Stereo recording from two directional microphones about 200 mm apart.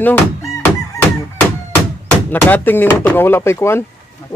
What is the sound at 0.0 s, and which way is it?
Fowl, 10° left (ahead or behind).